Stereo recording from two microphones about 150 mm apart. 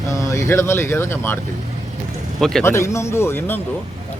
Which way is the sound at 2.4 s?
Centre (ahead or behind).